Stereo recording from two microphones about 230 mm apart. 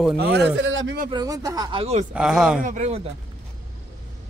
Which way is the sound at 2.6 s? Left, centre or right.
Right.